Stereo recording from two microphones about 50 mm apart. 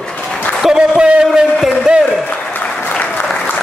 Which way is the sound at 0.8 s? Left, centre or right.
Right.